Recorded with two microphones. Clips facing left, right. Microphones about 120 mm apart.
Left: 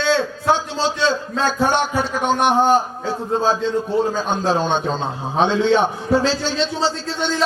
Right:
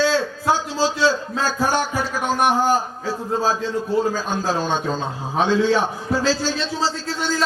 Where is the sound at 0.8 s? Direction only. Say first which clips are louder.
Even; 25° left (ahead or behind).